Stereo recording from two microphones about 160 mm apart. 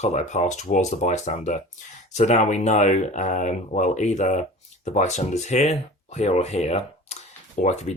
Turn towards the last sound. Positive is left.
turn(degrees=45)  # may be behind; listen again after turning